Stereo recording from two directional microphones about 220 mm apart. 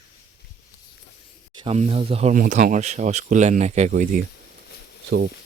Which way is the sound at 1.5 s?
25° right (ahead or behind).